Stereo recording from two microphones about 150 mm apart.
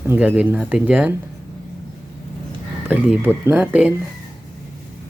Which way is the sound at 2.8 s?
10° right (ahead or behind).